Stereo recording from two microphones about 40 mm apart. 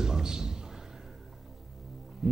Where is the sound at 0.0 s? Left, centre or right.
Centre.